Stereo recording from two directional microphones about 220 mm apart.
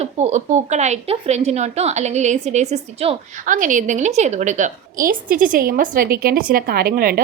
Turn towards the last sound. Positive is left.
turn(degrees=-40)  # may be behind; listen again after turning